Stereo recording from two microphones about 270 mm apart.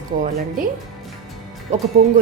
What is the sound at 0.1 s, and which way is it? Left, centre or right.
Speech, right.